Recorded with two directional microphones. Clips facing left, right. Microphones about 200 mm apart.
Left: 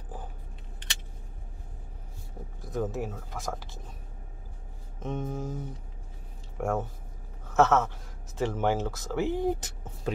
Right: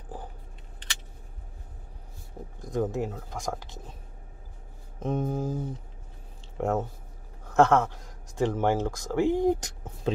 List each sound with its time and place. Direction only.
2.6 s speech: 15° right (ahead or behind)
5.0 s a sound: 35° right (ahead or behind)
6.6 s speech: 20° right (ahead or behind)